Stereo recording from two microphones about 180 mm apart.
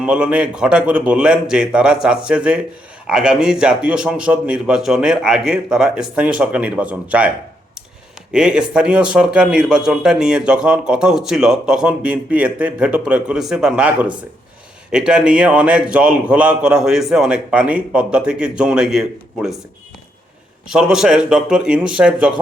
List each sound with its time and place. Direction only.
0.0 s a man's voice: 5° right (ahead or behind)
20.7 s a man's voice: 5° right (ahead or behind)